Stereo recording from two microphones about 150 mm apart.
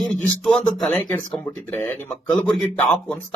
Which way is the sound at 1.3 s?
15° left (ahead or behind).